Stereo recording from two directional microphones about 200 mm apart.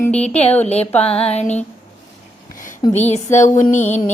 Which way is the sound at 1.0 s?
30° left (ahead or behind).